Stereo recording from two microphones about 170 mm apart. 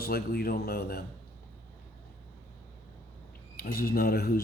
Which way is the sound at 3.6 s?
60° left (ahead or behind).